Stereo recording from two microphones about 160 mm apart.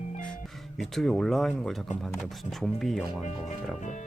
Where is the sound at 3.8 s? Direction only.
50° left (ahead or behind).